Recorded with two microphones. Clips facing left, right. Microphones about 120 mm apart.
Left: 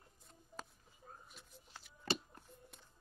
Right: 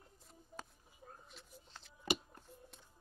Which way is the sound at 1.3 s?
5° left (ahead or behind).